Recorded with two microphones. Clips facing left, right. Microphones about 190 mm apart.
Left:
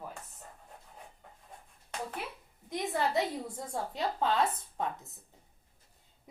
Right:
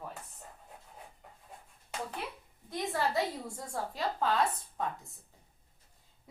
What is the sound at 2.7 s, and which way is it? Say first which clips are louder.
A woman's voice: left 1 dB; 20° left (ahead or behind).